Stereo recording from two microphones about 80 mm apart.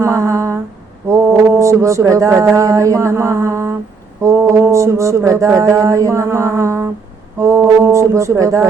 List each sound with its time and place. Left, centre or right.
0.0 s mantra: right